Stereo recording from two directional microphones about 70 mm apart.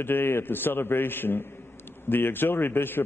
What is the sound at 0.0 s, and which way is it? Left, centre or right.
A man's voice, left.